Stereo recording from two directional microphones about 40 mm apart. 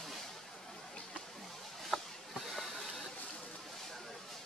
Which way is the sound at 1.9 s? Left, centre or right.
Centre.